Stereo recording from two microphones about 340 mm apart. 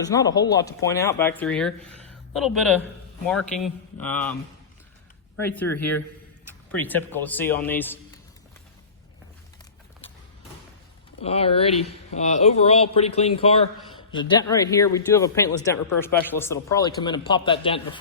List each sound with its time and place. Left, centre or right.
0.0 s speech: centre
5.4 s speech: centre
11.2 s speech: centre